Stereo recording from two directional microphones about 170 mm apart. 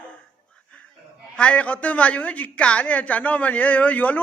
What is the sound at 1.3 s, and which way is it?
A woman's voice, 5° left (ahead or behind).